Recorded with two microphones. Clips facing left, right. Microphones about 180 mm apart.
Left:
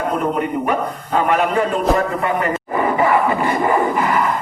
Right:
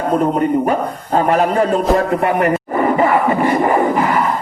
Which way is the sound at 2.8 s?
40° right (ahead or behind).